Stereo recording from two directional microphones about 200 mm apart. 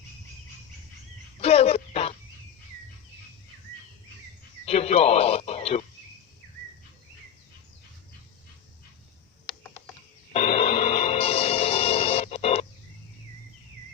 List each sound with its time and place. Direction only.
1.4 s a sound: 30° left (ahead or behind)
4.6 s radio: 30° left (ahead or behind)
10.3 s music: 30° left (ahead or behind)